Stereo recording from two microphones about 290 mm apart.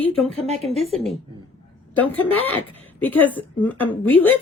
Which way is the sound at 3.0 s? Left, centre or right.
Centre.